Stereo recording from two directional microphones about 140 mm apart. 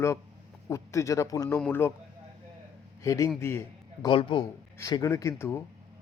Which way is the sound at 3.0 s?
25° left (ahead or behind).